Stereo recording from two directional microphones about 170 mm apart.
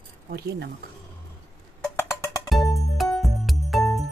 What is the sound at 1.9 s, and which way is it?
Music, 20° left (ahead or behind).